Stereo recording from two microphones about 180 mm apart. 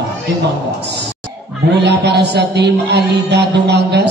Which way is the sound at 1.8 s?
70° right (ahead or behind).